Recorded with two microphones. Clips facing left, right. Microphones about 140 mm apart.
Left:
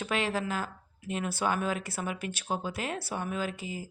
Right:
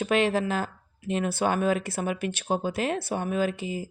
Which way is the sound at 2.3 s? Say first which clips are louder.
Right 6 dB; 25° right (ahead or behind).